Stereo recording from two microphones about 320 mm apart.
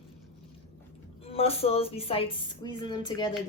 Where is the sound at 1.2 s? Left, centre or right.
Centre.